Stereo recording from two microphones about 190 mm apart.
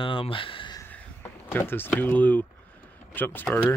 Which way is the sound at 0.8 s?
10° left (ahead or behind).